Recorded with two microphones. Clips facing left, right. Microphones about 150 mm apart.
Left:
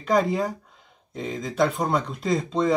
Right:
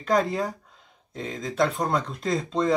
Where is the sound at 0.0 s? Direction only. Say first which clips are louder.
Left 2 dB; centre (ahead or behind).